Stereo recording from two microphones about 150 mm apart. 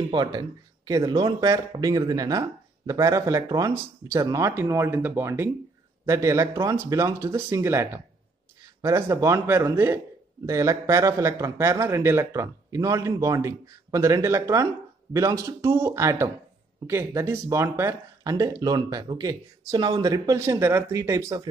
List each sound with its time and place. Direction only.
0.1 s speech: 30° right (ahead or behind)